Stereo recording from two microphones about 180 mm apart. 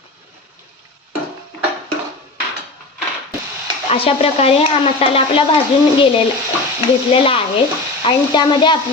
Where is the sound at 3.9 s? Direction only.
35° left (ahead or behind).